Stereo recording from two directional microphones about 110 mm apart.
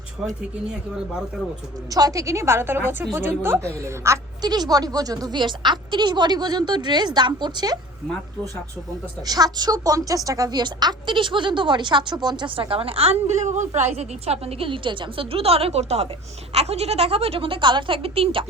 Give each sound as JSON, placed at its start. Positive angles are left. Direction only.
{"t": 1.9, "sound": "a woman's voice", "side_deg": -35}
{"t": 9.2, "sound": "speech", "side_deg": -35}
{"t": 13.9, "sound": "a woman's voice", "side_deg": -70}